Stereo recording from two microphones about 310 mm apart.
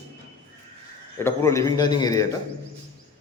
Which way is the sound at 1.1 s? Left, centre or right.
Centre.